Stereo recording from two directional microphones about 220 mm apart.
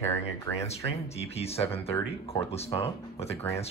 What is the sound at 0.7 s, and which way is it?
Speech, 30° left (ahead or behind).